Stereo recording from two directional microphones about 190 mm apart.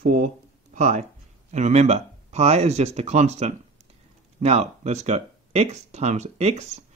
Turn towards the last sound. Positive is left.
turn(degrees=-35)  # may be behind; listen again after turning